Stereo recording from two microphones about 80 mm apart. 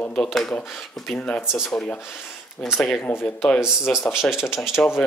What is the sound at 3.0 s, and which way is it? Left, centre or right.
Speech, left.